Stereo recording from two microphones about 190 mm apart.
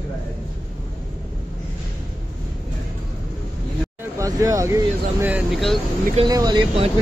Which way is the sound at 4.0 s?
15° right (ahead or behind).